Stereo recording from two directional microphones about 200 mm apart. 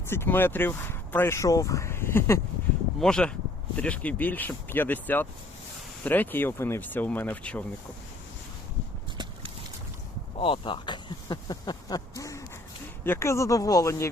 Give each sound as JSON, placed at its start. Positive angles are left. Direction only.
{"t": 0.1, "sound": "speech", "side_deg": 10}
{"t": 10.3, "sound": "speech", "side_deg": 25}